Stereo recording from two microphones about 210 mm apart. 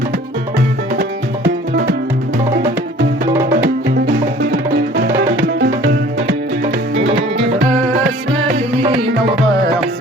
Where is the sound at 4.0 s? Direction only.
45° right (ahead or behind).